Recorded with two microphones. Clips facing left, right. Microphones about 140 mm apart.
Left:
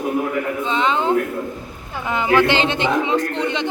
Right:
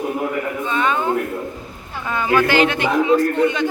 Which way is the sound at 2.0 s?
20° left (ahead or behind).